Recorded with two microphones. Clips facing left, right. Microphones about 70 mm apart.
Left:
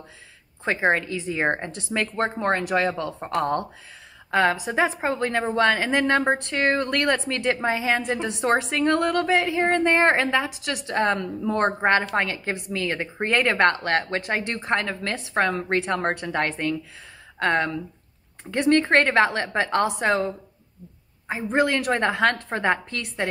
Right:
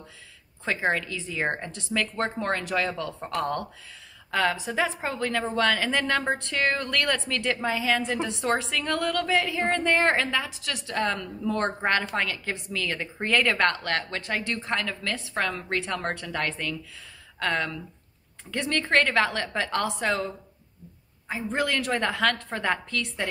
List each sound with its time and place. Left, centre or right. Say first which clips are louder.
0.8 s a woman's voice: left 6 dB; left